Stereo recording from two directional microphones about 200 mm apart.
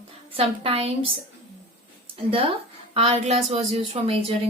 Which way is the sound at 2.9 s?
30° right (ahead or behind).